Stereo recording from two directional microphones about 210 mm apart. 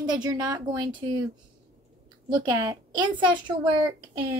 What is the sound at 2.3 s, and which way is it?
A woman's voice, 20° right (ahead or behind).